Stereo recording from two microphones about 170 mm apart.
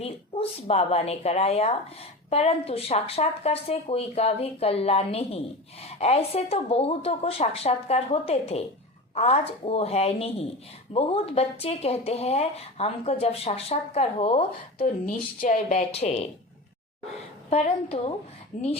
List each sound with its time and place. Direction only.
0.0 s speech: 35° left (ahead or behind)
15.0 s speech: 55° left (ahead or behind); by 16.3 s 40° left (ahead or behind)
17.5 s speech: 40° left (ahead or behind)